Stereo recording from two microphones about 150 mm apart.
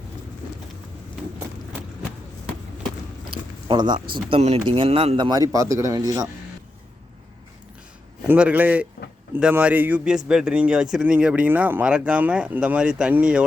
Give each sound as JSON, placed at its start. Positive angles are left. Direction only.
{"t": 3.7, "sound": "speech", "side_deg": -30}
{"t": 4.1, "sound": "speech", "side_deg": -40}
{"t": 8.3, "sound": "a man's voice", "side_deg": -10}